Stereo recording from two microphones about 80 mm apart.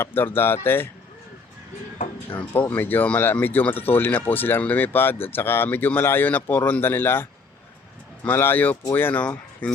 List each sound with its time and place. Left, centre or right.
0.0 s speech: left
2.3 s speech: left